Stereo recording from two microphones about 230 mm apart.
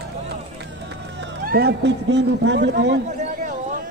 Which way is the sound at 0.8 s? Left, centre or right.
Right.